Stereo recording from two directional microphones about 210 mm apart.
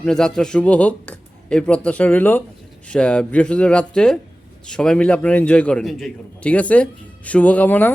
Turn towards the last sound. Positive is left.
turn(degrees=10)  # may be behind; listen again after turning